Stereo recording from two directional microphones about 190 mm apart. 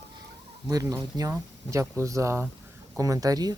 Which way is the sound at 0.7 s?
15° right (ahead or behind).